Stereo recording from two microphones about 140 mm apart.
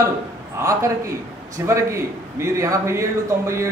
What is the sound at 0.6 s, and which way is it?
A man's voice, 20° right (ahead or behind).